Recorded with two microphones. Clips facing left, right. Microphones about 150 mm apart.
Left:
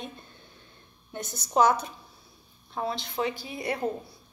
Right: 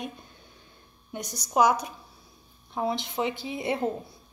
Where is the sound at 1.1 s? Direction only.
15° right (ahead or behind).